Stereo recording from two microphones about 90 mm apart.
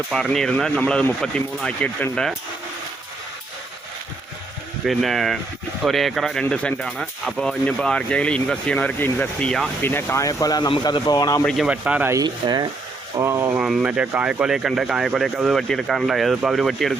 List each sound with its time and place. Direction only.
0.1 s speech: 5° left (ahead or behind)
4.9 s speech: centre (ahead or behind)
9.8 s speech: 25° left (ahead or behind)
11.5 s speech: 10° right (ahead or behind)
12.2 s speech: 50° right (ahead or behind)
13.2 s speech: 30° right (ahead or behind)
13.6 s speech: 5° right (ahead or behind)
13.8 s speech: 15° right (ahead or behind)